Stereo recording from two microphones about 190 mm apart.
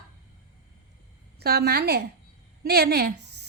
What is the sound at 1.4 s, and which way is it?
A woman's voice, 55° right (ahead or behind).